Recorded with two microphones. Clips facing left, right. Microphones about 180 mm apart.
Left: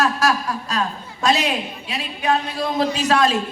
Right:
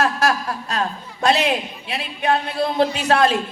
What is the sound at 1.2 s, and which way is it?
Speech, 55° right (ahead or behind).